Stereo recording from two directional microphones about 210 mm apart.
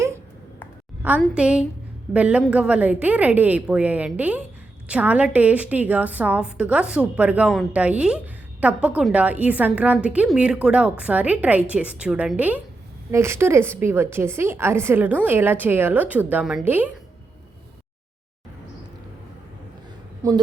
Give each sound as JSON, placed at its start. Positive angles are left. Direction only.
{"t": 1.2, "sound": "a woman's voice", "side_deg": -5}
{"t": 20.2, "sound": "a woman's voice", "side_deg": -15}